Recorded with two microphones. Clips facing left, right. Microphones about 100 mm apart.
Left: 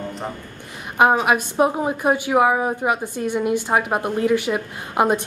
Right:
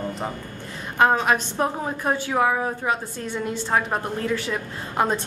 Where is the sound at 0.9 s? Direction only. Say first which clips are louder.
Left 3 dB; 15° left (ahead or behind).